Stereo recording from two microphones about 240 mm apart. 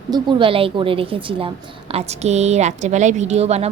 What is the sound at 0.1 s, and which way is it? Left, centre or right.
A woman's voice, centre.